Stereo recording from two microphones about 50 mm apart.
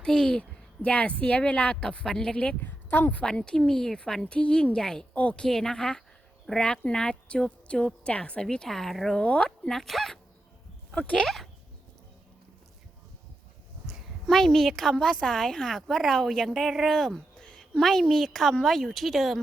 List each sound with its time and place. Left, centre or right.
0.0 s a woman's voice: centre
2.6 s speech: left
3.2 s a woman's voice: centre
5.1 s a woman's voice: left
5.4 s a woman's voice: centre
9.1 s a woman's voice: left
9.6 s speech: centre
13.8 s a sound: centre
14.9 s a woman's voice: centre
17.6 s a sound: centre
18.1 s speech: centre